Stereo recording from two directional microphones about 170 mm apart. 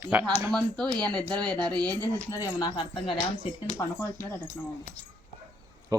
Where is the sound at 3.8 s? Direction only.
15° left (ahead or behind).